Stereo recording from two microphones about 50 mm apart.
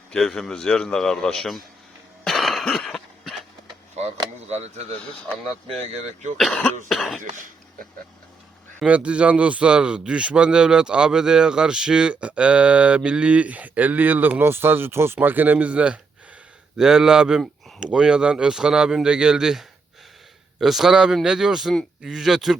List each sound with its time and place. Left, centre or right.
0.1 s a man's voice: centre
2.2 s cough: centre
2.6 s a sound: centre
6.5 s a man's voice: centre
8.9 s speech: right
14.4 s speech: right
15.5 s speech: right
16.7 s speech: centre